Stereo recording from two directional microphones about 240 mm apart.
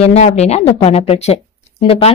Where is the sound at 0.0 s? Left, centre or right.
Left.